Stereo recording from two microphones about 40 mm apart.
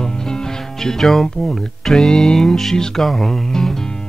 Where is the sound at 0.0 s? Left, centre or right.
Centre.